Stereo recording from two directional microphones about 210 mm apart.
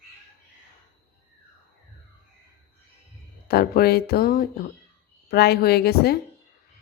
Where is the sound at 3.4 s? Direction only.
50° left (ahead or behind).